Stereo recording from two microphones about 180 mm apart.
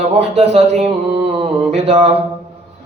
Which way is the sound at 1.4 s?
40° right (ahead or behind).